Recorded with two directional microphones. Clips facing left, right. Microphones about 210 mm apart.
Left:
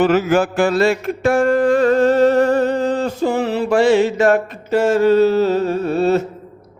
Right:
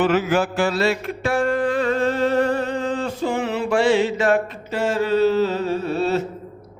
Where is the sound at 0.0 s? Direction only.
40° left (ahead or behind).